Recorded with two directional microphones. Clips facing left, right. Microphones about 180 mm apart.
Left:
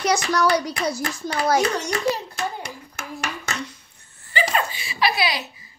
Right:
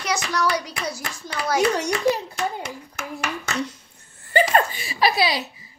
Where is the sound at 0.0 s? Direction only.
40° left (ahead or behind).